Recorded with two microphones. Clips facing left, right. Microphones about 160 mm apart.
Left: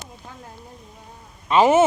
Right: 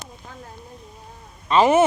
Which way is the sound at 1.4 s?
15° left (ahead or behind).